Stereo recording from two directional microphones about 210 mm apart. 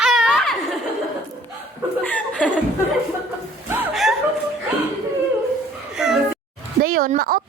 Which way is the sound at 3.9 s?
Centre (ahead or behind).